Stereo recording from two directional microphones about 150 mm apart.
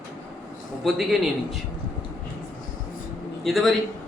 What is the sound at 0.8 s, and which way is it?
Speech, centre (ahead or behind).